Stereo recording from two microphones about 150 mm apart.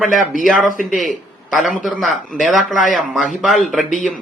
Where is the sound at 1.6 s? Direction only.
Centre (ahead or behind).